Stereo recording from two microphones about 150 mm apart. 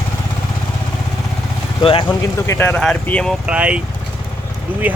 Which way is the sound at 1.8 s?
35° left (ahead or behind).